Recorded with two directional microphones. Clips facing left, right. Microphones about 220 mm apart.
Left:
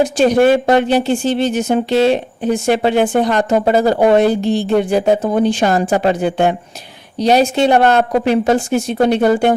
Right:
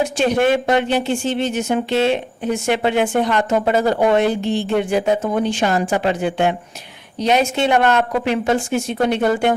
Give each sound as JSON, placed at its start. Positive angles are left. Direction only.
{"t": 0.0, "sound": "speech", "side_deg": 35}